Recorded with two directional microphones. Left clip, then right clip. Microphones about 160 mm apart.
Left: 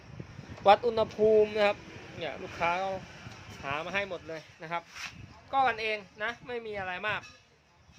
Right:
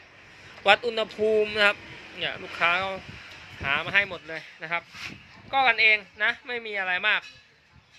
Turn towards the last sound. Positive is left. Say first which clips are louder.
# right 9 dB
turn(degrees=5)  # may be behind; listen again after turning